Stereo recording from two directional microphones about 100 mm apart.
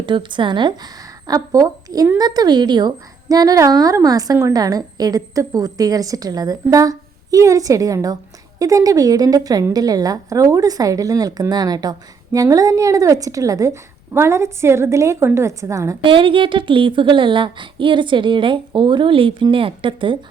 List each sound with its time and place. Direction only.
0.0 s speech: 50° right (ahead or behind)
1.3 s a woman's voice: 40° right (ahead or behind)
16.0 s a woman's voice: 60° right (ahead or behind)